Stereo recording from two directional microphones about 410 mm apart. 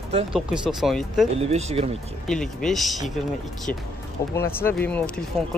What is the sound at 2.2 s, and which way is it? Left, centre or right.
Speech, centre.